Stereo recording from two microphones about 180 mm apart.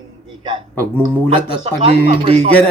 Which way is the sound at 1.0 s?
10° left (ahead or behind).